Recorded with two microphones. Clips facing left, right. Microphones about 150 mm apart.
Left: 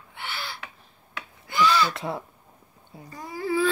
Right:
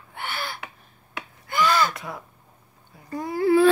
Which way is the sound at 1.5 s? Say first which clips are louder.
Even; 50° right (ahead or behind).